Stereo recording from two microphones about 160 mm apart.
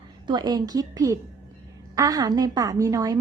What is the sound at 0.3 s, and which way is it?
Speech, 25° right (ahead or behind).